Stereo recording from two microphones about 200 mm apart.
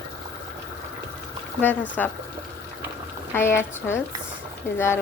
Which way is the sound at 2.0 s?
10° left (ahead or behind).